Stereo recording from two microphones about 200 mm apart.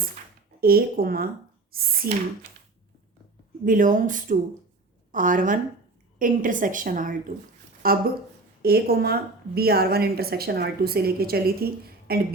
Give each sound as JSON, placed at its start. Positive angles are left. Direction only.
{"t": 0.6, "sound": "a woman's voice", "side_deg": -50}
{"t": 3.6, "sound": "a woman's voice", "side_deg": -40}